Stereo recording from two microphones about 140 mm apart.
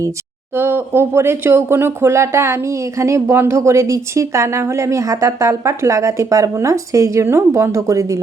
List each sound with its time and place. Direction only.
0.5 s speech: 15° right (ahead or behind)